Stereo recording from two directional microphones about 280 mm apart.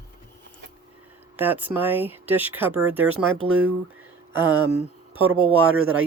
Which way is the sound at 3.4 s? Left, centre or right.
Right.